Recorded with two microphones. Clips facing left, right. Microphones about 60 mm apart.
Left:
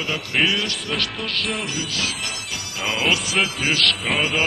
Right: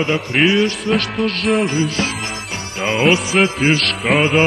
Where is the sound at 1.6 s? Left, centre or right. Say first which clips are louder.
Right 8 dB; right.